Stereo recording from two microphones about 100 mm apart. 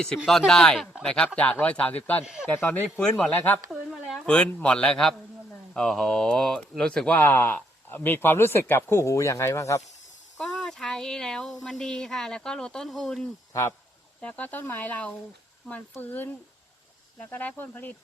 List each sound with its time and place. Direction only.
0.3 s speech: 5° left (ahead or behind)
2.2 s speech: 5° right (ahead or behind)
2.5 s speech: 15° left (ahead or behind)
3.0 s speech: 5° left (ahead or behind)
3.7 s a sound: centre (ahead or behind)
4.3 s speech: 10° left (ahead or behind); by 9.8 s 30° left (ahead or behind)
10.3 s snake: 5° left (ahead or behind)
11.6 s speech: 5° left (ahead or behind)
13.5 s speech: 30° left (ahead or behind)
14.2 s speech: 15° left (ahead or behind)